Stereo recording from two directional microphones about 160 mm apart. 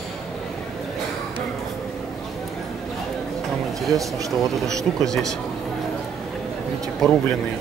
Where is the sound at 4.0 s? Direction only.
20° right (ahead or behind).